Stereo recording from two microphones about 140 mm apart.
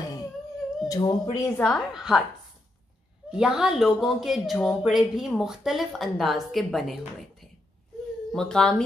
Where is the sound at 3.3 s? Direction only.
5° right (ahead or behind).